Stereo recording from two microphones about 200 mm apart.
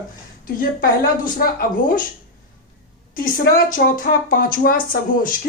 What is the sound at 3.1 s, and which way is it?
Speech, 45° left (ahead or behind).